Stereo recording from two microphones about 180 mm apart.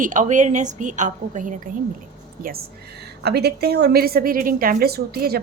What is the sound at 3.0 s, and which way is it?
A woman's voice, 65° right (ahead or behind).